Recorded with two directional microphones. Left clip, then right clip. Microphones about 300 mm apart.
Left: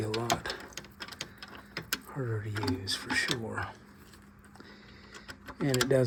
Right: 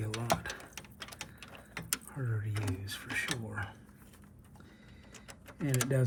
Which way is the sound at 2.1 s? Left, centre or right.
Left.